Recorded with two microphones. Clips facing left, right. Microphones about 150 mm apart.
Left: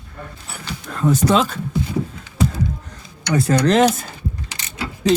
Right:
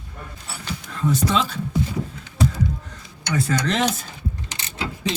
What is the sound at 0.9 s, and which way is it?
Speech, 50° left (ahead or behind).